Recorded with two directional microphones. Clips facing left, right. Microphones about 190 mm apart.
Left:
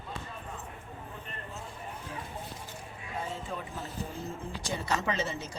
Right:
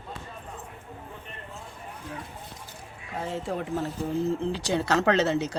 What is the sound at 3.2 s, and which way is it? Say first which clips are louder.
Speech: right 10 dB; 75° right (ahead or behind).